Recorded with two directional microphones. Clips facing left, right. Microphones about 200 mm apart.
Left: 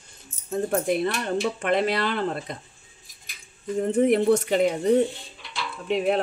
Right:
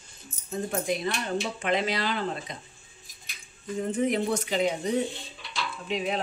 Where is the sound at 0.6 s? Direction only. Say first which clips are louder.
Left 5 dB; 55° left (ahead or behind).